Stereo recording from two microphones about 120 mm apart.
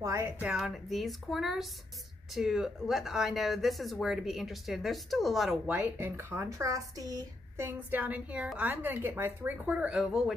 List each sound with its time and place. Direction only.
0.0 s a sound: 25° right (ahead or behind)
0.4 s speech: 10° right (ahead or behind)
5.7 s speech: 15° right (ahead or behind)
7.6 s speech: 15° right (ahead or behind)